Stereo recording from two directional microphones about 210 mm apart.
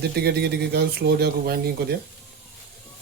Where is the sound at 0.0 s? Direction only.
50° right (ahead or behind).